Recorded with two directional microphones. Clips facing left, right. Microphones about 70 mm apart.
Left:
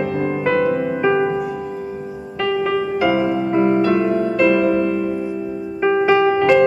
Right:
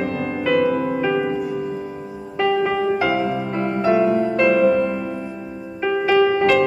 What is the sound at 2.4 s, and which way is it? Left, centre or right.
Music, centre.